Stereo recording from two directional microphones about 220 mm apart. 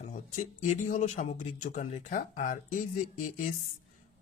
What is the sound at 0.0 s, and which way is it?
Speech, 35° left (ahead or behind).